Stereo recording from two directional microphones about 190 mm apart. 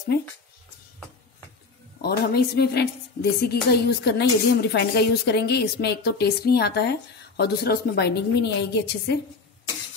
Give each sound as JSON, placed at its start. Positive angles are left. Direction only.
{"t": 2.0, "sound": "a woman's voice", "side_deg": 55}